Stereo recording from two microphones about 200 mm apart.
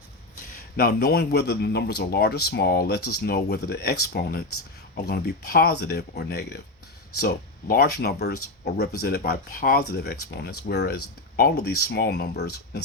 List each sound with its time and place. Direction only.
0.8 s speech: 50° left (ahead or behind)
7.7 s speech: 50° left (ahead or behind)